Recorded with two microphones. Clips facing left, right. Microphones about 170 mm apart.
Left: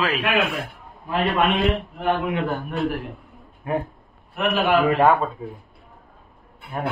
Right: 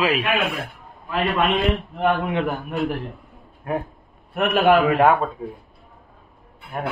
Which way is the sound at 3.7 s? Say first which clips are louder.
Left 1 dB; centre (ahead or behind).